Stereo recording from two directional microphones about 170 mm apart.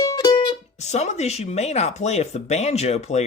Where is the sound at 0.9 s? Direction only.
40° left (ahead or behind).